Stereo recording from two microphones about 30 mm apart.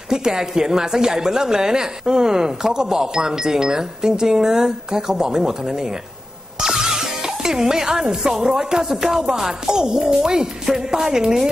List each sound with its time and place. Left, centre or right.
0.1 s a woman's voice: right
6.6 s music: right
7.5 s a woman's voice: right